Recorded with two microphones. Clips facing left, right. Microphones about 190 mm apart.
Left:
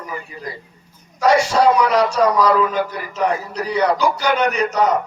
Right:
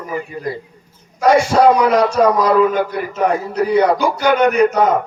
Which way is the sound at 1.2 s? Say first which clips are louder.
Right 3 dB; 55° right (ahead or behind).